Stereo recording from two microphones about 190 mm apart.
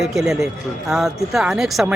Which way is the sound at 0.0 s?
Centre (ahead or behind).